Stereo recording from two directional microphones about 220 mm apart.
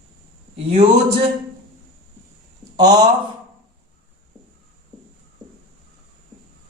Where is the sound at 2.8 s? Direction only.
20° right (ahead or behind).